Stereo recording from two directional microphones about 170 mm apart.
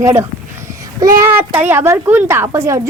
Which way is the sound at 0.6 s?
20° right (ahead or behind).